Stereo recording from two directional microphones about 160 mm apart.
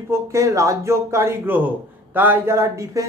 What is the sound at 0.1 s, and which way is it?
A man's voice, 20° right (ahead or behind).